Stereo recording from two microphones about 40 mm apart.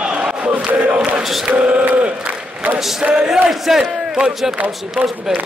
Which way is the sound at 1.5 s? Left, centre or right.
Right.